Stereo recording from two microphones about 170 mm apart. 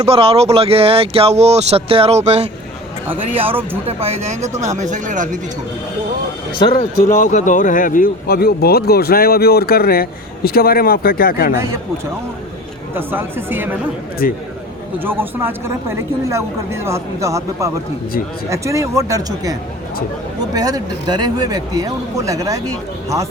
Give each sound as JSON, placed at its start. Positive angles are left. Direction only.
{"t": 0.0, "sound": "speech", "side_deg": -35}
{"t": 6.7, "sound": "speech", "side_deg": 45}
{"t": 12.9, "sound": "a woman's voice", "side_deg": -10}
{"t": 14.2, "sound": "speech", "side_deg": 55}
{"t": 14.9, "sound": "a woman's voice", "side_deg": -10}